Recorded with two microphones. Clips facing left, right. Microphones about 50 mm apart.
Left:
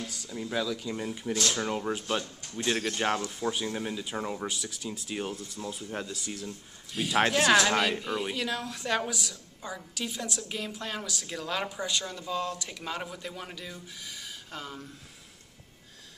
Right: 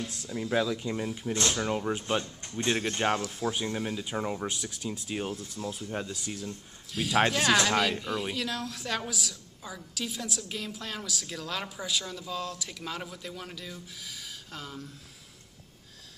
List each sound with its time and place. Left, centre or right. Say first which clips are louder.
0.3 s speech: right 3 dB; centre
0.9 s speech: right 1 dB; centre
1.3 s speech: even; right
1.7 s speech: right 1 dB; centre
2.4 s speech: right 1 dB; right
3.0 s a woman's voice: right 1 dB; centre